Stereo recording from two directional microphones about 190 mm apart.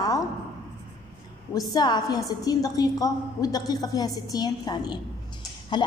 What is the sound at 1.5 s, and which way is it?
A woman's voice, 20° left (ahead or behind).